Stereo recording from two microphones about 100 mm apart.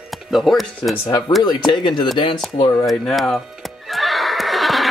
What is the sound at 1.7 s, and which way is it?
Speech, 50° left (ahead or behind).